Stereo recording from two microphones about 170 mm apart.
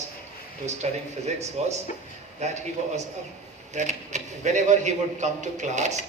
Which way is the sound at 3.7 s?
45° right (ahead or behind).